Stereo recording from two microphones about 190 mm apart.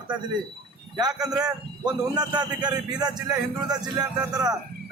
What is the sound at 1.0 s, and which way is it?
A man's voice, 20° right (ahead or behind).